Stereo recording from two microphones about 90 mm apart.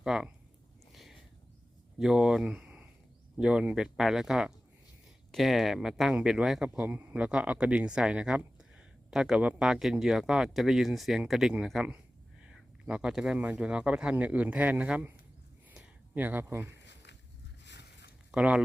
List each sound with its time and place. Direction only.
0.0 s speech: 10° right (ahead or behind)
0.9 s a sound: centre (ahead or behind)
2.0 s speech: 5° right (ahead or behind)
6.8 s speech: 20° right (ahead or behind)
16.1 s speech: 20° right (ahead or behind)
18.3 s speech: 10° right (ahead or behind)